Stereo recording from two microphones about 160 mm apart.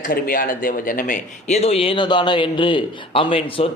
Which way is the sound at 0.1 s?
65° left (ahead or behind).